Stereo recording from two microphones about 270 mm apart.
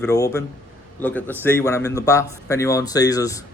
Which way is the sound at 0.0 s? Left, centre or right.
Centre.